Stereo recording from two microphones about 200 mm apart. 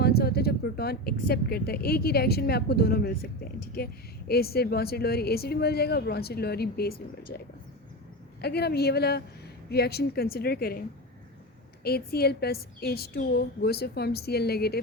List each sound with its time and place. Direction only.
0.0 s a woman's voice: 50° left (ahead or behind)